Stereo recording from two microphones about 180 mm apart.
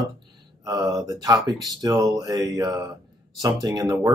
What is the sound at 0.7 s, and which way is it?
Speech, 20° right (ahead or behind).